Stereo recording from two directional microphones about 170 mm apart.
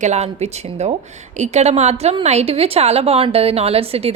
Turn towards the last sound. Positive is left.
turn(degrees=-35)  # may be behind; listen again after turning